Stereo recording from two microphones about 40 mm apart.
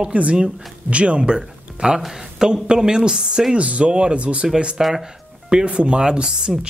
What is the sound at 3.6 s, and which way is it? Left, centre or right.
Speech, right.